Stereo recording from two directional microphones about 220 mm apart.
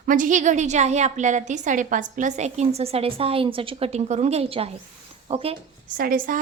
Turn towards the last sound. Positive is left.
turn(degrees=-40)  # may be behind; listen again after turning